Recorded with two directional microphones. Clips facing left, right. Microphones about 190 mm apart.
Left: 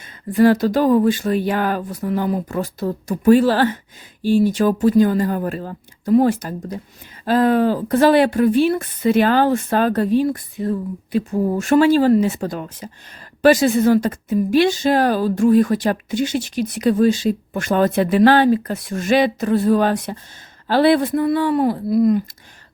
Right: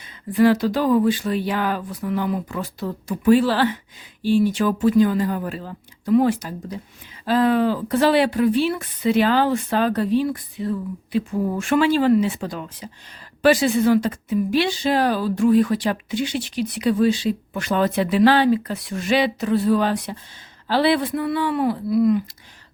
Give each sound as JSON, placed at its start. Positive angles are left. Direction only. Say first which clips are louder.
{"t": 0.0, "sound": "speech", "louder": "left 2 dB", "side_deg": 45}